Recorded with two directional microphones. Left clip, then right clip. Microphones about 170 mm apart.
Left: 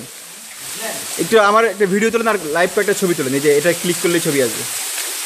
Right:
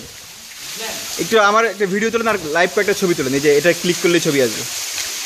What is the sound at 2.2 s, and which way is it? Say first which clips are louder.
Speech: even; 15° right (ahead or behind).